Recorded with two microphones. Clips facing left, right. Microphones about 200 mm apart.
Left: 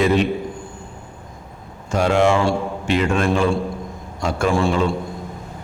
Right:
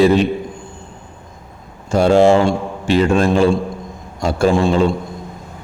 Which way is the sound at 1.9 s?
35° right (ahead or behind).